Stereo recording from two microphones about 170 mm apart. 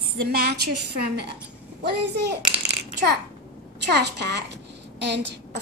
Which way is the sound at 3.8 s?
90° right.